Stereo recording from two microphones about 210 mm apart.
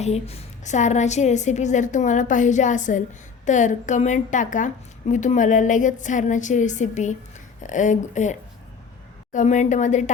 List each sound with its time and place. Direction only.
0.0 s a woman's voice: 30° left (ahead or behind)